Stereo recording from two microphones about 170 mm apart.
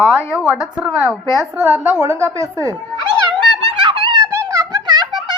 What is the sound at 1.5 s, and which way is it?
A woman's voice, 15° right (ahead or behind).